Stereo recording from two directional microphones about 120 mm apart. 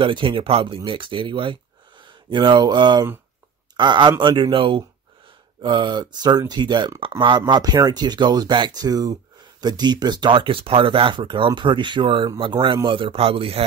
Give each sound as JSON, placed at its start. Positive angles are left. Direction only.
{"t": 0.0, "sound": "a man's voice", "side_deg": -45}